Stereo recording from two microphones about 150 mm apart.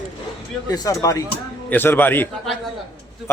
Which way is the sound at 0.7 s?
25° left (ahead or behind).